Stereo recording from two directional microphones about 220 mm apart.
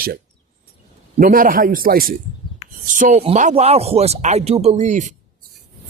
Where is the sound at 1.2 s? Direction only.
40° right (ahead or behind).